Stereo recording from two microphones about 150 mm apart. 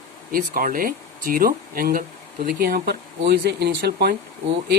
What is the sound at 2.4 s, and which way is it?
Speech, 90° right.